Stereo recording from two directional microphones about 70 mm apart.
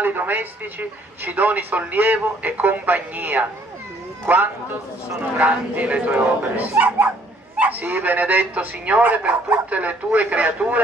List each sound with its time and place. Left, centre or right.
0.0 s a man's voice: right
5.4 s a man's voice: centre